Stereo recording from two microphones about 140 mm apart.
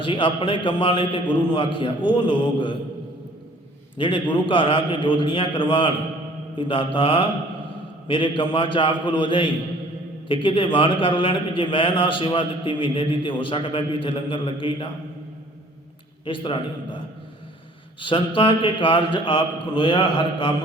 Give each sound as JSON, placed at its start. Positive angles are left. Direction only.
{"t": 0.0, "sound": "a man's voice", "side_deg": 35}
{"t": 3.9, "sound": "a man's voice", "side_deg": 35}
{"t": 16.2, "sound": "a man's voice", "side_deg": 35}
{"t": 18.0, "sound": "a man's voice", "side_deg": 35}